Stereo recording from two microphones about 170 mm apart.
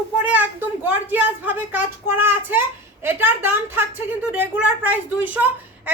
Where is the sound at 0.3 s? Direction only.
10° right (ahead or behind).